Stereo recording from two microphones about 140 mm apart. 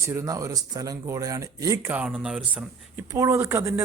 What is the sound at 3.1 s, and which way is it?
Speech, 20° right (ahead or behind).